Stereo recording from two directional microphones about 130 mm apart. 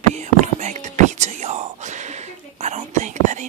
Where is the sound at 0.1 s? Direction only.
65° right (ahead or behind).